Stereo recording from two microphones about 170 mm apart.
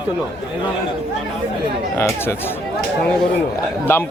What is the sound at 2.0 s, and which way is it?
Speech, 15° left (ahead or behind).